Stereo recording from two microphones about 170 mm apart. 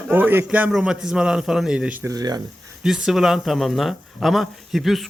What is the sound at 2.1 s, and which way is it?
Speech, 20° right (ahead or behind).